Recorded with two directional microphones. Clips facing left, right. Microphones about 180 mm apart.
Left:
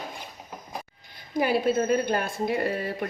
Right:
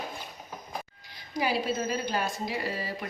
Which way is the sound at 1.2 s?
55° left (ahead or behind).